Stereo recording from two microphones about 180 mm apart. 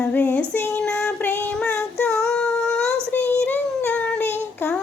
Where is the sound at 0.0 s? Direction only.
10° left (ahead or behind).